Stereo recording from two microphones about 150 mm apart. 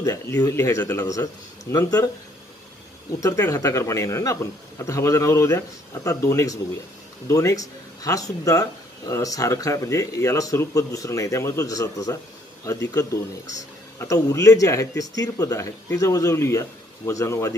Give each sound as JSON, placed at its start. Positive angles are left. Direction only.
{"t": 0.0, "sound": "speech", "side_deg": 20}
{"t": 3.2, "sound": "speech", "side_deg": 20}